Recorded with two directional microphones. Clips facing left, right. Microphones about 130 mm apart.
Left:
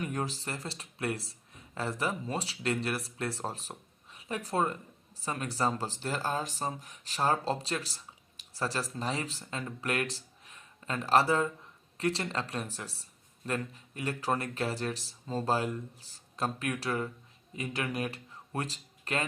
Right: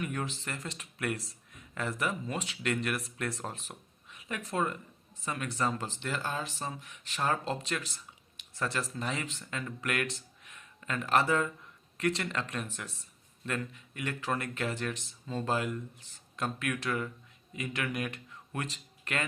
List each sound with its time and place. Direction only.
0.0 s speech: 35° left (ahead or behind)